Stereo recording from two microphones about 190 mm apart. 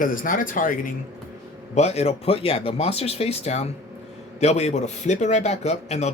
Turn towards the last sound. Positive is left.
turn(degrees=35)  # may be behind; listen again after turning